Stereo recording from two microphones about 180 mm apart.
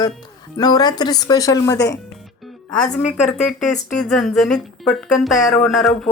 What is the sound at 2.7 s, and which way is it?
Speech, 5° left (ahead or behind).